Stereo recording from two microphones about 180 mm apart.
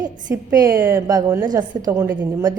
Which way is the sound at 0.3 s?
20° right (ahead or behind).